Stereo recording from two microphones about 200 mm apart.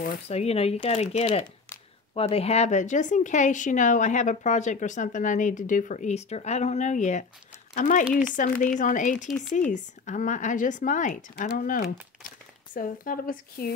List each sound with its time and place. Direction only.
0.0 s speech: 30° left (ahead or behind)